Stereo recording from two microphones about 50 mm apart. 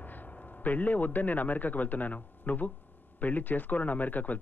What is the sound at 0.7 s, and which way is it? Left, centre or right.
A man's voice, left.